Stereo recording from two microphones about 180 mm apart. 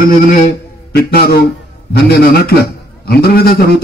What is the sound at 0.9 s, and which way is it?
Speech, 60° left (ahead or behind).